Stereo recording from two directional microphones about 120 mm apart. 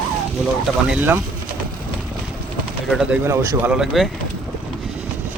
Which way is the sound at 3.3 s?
25° right (ahead or behind).